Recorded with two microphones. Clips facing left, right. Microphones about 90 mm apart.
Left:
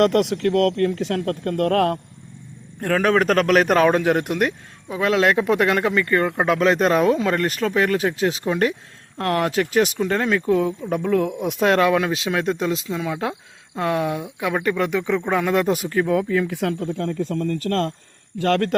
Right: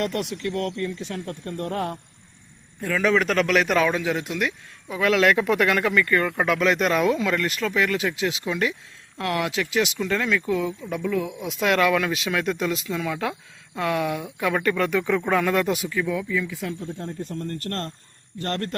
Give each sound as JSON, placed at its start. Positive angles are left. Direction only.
{"t": 0.0, "sound": "speech", "side_deg": 70}
{"t": 2.8, "sound": "a man's voice", "side_deg": 55}
{"t": 4.9, "sound": "speech", "side_deg": 30}
{"t": 11.6, "sound": "speech", "side_deg": 35}
{"t": 15.6, "sound": "speech", "side_deg": 45}